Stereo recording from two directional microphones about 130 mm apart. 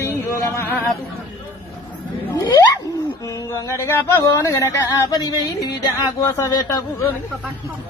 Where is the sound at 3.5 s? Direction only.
20° left (ahead or behind).